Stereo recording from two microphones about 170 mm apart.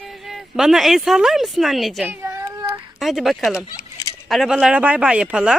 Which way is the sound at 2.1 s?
15° right (ahead or behind).